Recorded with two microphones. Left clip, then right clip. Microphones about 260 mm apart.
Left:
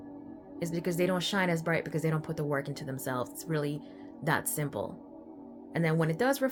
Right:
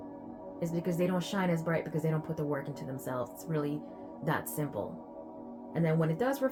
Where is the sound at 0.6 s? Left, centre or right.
Left.